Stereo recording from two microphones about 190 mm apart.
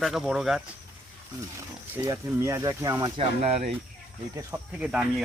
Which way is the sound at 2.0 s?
15° right (ahead or behind).